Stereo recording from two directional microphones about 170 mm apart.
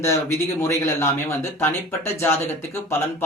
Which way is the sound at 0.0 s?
15° left (ahead or behind).